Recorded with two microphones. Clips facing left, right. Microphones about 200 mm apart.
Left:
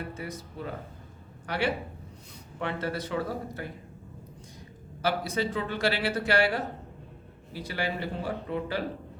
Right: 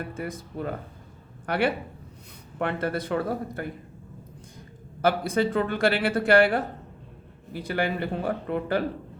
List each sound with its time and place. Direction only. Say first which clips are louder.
0.1 s speech: right 4 dB; 55° right (ahead or behind)
5.0 s speech: right 5 dB; 55° right (ahead or behind)